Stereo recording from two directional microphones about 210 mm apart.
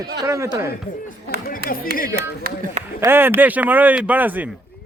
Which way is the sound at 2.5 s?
45° right (ahead or behind).